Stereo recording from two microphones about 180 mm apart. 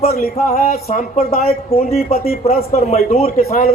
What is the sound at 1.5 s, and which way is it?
Speech, 35° left (ahead or behind).